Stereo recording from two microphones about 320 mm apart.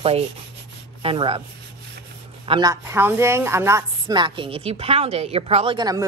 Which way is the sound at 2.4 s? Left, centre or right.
Centre.